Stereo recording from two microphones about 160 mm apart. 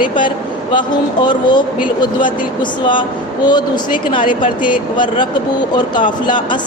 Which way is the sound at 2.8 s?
30° left (ahead or behind).